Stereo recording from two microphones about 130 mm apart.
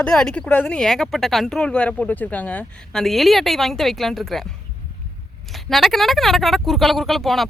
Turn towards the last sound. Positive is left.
turn(degrees=0)  # may be behind; listen again after turning